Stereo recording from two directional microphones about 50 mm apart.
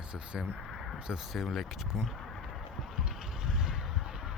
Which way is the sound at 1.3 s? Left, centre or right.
Centre.